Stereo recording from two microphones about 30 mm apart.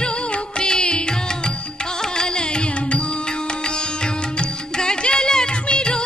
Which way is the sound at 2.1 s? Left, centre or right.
Left.